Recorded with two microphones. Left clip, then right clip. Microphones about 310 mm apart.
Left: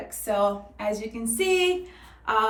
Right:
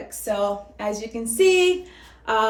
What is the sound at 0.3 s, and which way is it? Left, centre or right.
Speech, centre.